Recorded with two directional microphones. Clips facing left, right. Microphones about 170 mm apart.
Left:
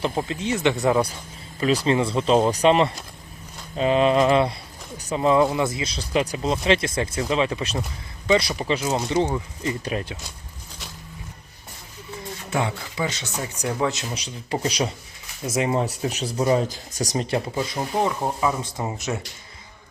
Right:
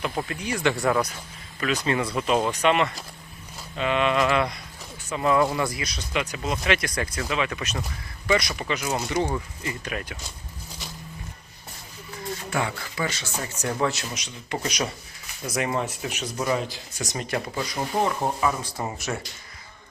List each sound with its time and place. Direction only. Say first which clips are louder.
0.0 s speech: left 4 dB; 25° left (ahead or behind)
1.5 s speech: left 5 dB; 30° left (ahead or behind)
5.2 s speech: left 3 dB; 25° left (ahead or behind)
12.5 s speech: left 4 dB; 20° left (ahead or behind)
14.1 s speech: left 4 dB; 30° left (ahead or behind)
16.6 s speech: left 5 dB; 45° left (ahead or behind); by 19.2 s 20° left (ahead or behind)